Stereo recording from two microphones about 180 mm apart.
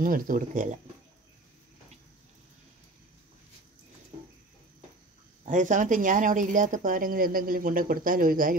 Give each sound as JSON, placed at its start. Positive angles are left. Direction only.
{"t": 0.0, "sound": "speech", "side_deg": -50}
{"t": 5.4, "sound": "speech", "side_deg": -45}